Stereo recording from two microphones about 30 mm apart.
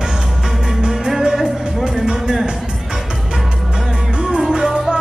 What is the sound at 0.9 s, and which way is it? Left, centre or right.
Music, centre.